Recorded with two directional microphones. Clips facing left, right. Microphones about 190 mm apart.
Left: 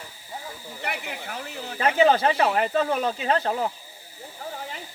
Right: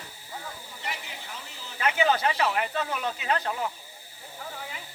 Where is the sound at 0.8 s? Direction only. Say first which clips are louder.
Left 7 dB; 60° left (ahead or behind).